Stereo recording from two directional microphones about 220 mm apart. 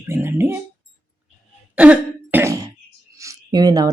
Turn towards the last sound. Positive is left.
turn(degrees=-15)  # may be behind; listen again after turning